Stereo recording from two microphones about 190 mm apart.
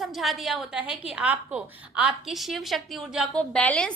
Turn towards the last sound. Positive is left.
turn(degrees=5)  # may be behind; listen again after turning